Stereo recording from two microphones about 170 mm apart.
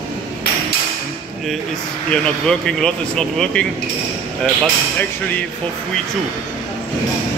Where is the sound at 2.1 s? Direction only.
5° left (ahead or behind).